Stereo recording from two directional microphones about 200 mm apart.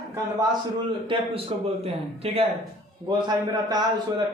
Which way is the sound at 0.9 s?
25° right (ahead or behind).